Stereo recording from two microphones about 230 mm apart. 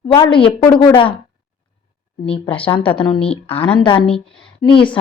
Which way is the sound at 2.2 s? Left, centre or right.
Left.